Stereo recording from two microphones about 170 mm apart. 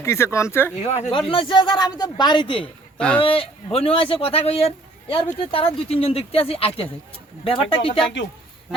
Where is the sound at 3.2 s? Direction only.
35° left (ahead or behind).